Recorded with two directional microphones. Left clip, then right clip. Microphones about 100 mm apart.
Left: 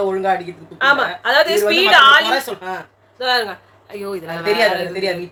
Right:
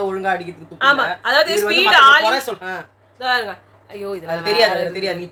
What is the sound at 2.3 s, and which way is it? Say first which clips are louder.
Speech: left 1 dB; 35° right (ahead or behind).